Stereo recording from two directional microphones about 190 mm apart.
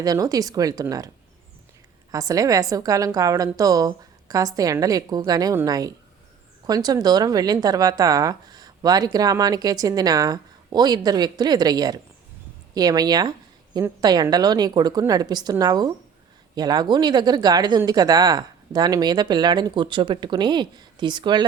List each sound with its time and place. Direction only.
0.0 s speech: 20° right (ahead or behind)
2.1 s speech: 20° right (ahead or behind)